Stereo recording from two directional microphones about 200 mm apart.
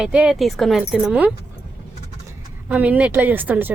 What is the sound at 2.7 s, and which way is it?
A woman's voice, 5° right (ahead or behind).